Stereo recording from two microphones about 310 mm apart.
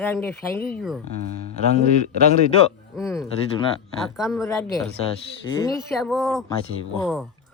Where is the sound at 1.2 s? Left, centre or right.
Right.